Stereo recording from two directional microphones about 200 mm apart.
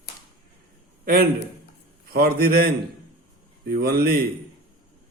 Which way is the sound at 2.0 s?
50° right (ahead or behind).